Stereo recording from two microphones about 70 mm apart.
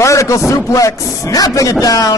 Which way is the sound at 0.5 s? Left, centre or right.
Left.